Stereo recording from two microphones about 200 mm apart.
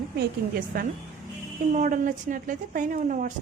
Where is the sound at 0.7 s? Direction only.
45° right (ahead or behind).